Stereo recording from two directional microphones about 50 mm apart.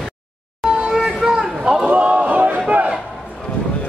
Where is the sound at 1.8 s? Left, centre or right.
Right.